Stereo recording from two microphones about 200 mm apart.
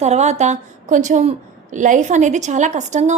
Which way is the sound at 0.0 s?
35° right (ahead or behind).